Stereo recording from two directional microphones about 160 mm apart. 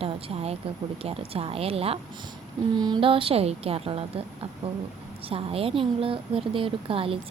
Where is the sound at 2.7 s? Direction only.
25° right (ahead or behind).